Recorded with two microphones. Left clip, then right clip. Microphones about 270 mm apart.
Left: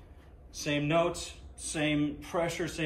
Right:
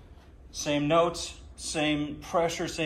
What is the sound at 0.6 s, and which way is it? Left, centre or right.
A man's voice, centre.